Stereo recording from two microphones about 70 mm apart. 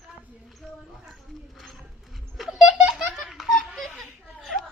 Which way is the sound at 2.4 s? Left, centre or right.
Centre.